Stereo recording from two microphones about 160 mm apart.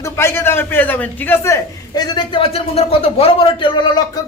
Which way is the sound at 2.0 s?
30° left (ahead or behind).